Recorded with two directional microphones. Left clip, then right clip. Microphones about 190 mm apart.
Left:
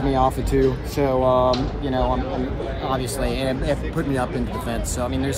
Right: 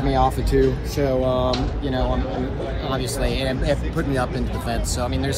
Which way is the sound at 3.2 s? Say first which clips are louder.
Even; 20° left (ahead or behind).